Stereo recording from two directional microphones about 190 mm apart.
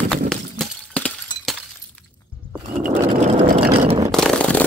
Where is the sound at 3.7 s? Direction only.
30° right (ahead or behind).